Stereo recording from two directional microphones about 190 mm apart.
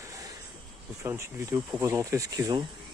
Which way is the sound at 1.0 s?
15° right (ahead or behind).